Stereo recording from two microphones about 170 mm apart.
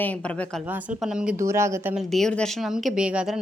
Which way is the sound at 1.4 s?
15° right (ahead or behind).